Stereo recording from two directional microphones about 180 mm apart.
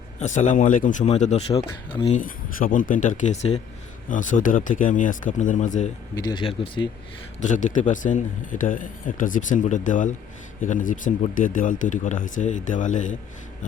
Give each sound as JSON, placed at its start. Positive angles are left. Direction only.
{"t": 0.2, "sound": "speech", "side_deg": 45}
{"t": 2.1, "sound": "speech", "side_deg": 50}
{"t": 6.1, "sound": "speech", "side_deg": 25}
{"t": 7.4, "sound": "speech", "side_deg": 45}